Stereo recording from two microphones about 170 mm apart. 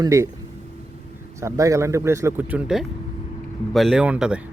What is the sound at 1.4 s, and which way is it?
Speech, 20° right (ahead or behind).